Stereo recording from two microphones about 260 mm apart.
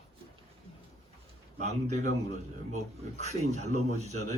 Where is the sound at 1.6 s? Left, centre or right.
Right.